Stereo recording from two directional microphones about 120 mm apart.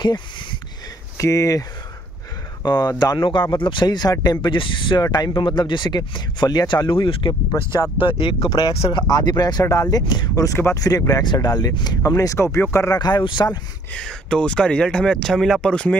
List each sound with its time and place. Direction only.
0.0 s a sound: 40° left (ahead or behind)
1.1 s speech: 25° left (ahead or behind)
2.6 s speech: 35° left (ahead or behind)
7.5 s speech: 25° left (ahead or behind)
8.0 s speech: 45° left (ahead or behind)
8.7 s speech: 50° left (ahead or behind)
9.0 s speech: 35° left (ahead or behind)
13.0 s speech: 40° left (ahead or behind)
13.9 s speech: 5° left (ahead or behind)